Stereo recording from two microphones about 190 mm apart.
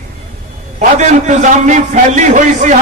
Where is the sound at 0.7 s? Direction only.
40° right (ahead or behind).